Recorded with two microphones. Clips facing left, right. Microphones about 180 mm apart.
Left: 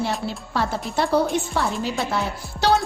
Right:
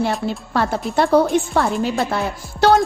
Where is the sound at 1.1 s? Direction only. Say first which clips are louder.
Right 6 dB; 55° right (ahead or behind).